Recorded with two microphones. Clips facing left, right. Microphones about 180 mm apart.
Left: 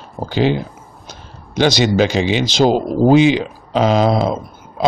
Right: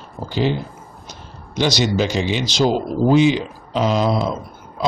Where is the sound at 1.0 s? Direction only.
55° left (ahead or behind).